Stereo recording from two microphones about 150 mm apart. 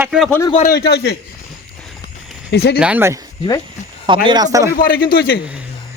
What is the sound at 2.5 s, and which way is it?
Speech, 90° left.